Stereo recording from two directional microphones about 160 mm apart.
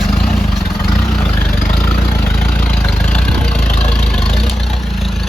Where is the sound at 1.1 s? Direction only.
10° left (ahead or behind).